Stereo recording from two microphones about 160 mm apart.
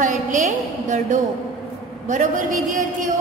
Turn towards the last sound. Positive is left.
turn(degrees=-55)  # may be behind; listen again after turning